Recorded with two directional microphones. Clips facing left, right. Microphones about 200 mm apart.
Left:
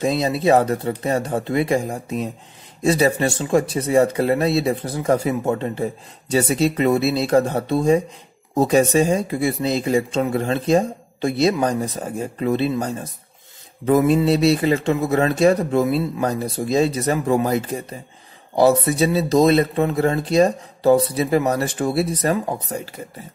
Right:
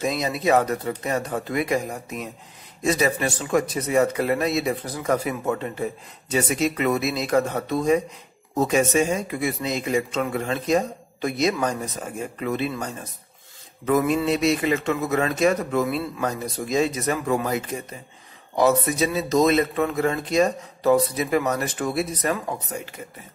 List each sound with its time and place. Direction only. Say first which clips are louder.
0.0 s speech: left 5 dB; 30° left (ahead or behind)